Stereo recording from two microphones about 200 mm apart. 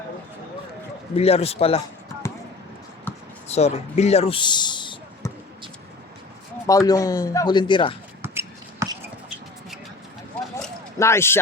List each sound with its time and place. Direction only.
1.1 s a man's voice: 30° left (ahead or behind)
3.5 s speech: 35° left (ahead or behind)
6.7 s a man's voice: 15° left (ahead or behind)
8.2 s shuffle: 15° right (ahead or behind)
11.0 s speech: 15° left (ahead or behind)